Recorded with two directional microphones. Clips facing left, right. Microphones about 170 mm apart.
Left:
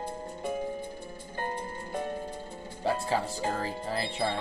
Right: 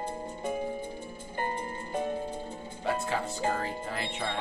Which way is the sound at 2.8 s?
35° left (ahead or behind).